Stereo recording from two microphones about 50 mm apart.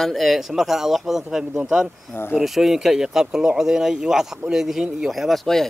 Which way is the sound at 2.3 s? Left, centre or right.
Centre.